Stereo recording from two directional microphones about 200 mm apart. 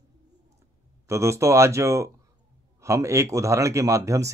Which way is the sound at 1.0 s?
15° right (ahead or behind).